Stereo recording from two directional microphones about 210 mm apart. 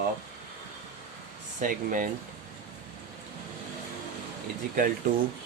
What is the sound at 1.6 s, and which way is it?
Speech, 40° right (ahead or behind).